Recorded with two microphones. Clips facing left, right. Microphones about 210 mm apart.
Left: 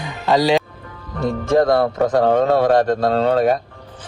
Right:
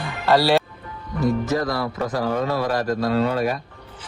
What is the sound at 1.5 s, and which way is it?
Speech, 55° left (ahead or behind).